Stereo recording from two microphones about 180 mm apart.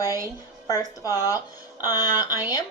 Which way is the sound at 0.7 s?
20° left (ahead or behind).